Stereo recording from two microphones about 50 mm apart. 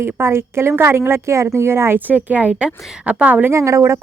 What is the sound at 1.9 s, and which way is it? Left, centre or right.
A woman's voice, right.